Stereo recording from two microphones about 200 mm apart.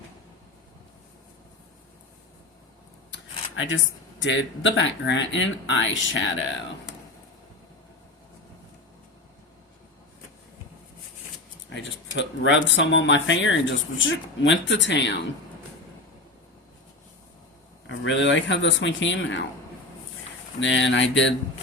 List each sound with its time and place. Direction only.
3.1 s a sound: 70° left (ahead or behind)
4.2 s speech: 65° left (ahead or behind)
11.7 s speech: 65° left (ahead or behind)
17.8 s speech: 70° left (ahead or behind)
20.6 s speech: 65° left (ahead or behind)